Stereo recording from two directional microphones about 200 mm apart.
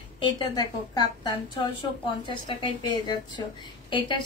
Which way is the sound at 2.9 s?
20° left (ahead or behind).